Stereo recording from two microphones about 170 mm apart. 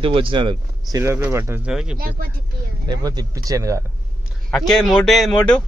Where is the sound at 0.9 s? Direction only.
15° right (ahead or behind).